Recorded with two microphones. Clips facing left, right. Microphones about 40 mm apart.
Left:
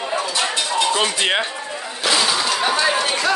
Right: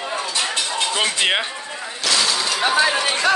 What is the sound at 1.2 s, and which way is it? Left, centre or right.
Speech, centre.